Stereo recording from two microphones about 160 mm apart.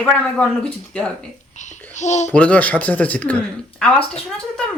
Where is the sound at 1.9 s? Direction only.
45° left (ahead or behind).